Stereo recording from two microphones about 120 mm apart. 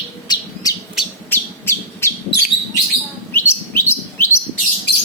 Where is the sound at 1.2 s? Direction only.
20° left (ahead or behind).